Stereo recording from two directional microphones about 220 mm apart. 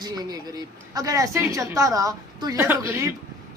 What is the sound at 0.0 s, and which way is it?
A woman's voice, 15° right (ahead or behind).